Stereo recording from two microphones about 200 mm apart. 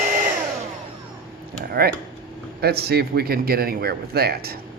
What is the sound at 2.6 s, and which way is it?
A man's voice, 50° right (ahead or behind).